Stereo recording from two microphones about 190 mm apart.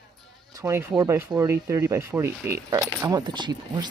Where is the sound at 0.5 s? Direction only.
15° right (ahead or behind).